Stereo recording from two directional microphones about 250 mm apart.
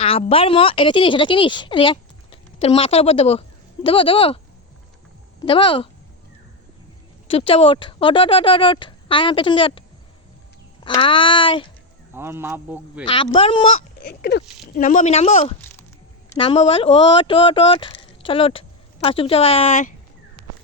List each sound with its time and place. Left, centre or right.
0.0 s speech: left
5.4 s speech: centre
7.3 s speech: left
10.8 s speech: centre
12.1 s speech: centre
13.1 s speech: left
14.0 s a sound: left
14.8 s speech: left